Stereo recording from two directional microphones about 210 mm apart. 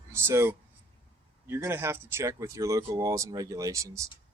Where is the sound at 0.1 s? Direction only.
10° right (ahead or behind).